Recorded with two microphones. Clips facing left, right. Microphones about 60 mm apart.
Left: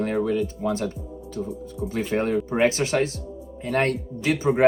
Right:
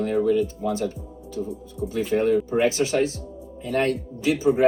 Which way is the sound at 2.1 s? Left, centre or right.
Left.